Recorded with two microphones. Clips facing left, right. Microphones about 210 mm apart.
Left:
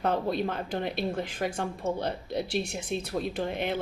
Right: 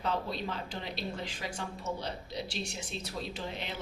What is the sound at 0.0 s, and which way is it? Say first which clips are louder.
Speech: left 7 dB; 55° left (ahead or behind).